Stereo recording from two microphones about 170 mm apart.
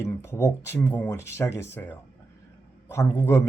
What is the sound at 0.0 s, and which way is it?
Speech, 15° left (ahead or behind).